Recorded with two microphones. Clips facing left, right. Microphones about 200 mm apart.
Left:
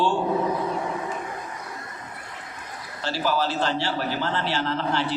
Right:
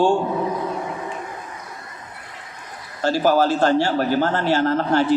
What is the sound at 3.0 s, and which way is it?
Speech, 45° right (ahead or behind).